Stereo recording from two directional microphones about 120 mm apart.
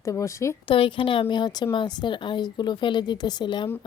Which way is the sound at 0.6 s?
45° left (ahead or behind).